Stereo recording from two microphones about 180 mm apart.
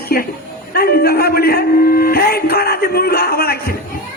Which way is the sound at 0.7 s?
60° left (ahead or behind).